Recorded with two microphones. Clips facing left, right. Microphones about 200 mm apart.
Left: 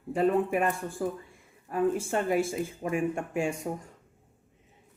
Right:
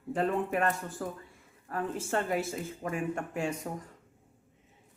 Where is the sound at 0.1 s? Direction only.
10° left (ahead or behind).